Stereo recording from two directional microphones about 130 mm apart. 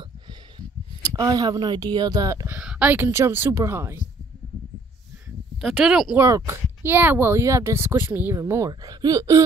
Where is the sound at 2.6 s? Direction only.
10° right (ahead or behind).